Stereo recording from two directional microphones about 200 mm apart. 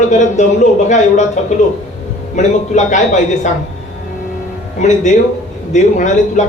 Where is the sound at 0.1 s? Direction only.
35° left (ahead or behind).